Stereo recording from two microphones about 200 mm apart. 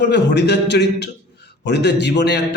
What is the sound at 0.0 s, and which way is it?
A man's voice, 60° left (ahead or behind).